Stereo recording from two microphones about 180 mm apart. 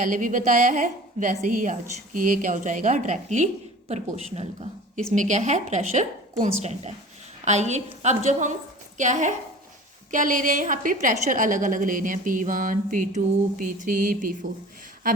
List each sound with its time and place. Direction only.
0.0 s a woman's voice: 45° right (ahead or behind)